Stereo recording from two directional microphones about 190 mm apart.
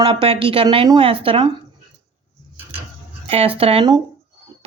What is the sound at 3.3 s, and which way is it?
Speech, 30° right (ahead or behind).